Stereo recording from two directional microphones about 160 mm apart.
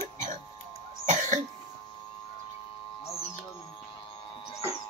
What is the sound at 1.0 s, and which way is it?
Cough, 50° right (ahead or behind).